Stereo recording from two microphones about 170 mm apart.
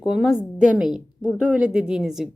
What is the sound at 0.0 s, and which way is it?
Speech, 5° right (ahead or behind).